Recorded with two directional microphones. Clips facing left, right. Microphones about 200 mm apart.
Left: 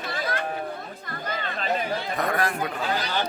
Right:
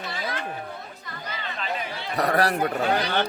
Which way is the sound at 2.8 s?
60° right (ahead or behind).